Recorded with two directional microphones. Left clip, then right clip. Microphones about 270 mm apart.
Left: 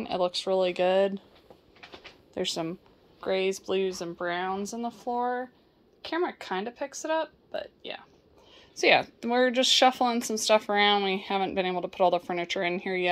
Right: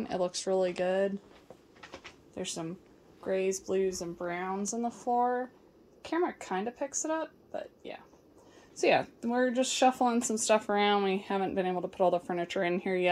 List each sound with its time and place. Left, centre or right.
0.0 s speech: centre
0.7 s speech: centre
2.3 s a woman's voice: centre
9.2 s speech: centre
9.9 s speech: centre